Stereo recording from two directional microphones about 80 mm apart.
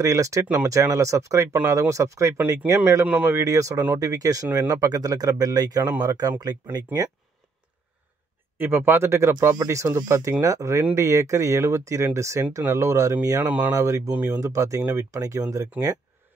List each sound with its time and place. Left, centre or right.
0.0 s speech: right
8.5 s speech: right
13.4 s speech: right
13.7 s speech: right
14.1 s speech: centre
14.4 s speech: right